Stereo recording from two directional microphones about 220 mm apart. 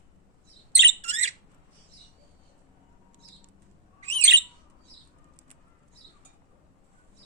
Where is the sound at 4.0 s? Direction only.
30° right (ahead or behind).